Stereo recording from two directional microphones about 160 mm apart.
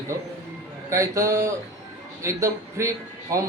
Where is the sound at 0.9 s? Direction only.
20° right (ahead or behind).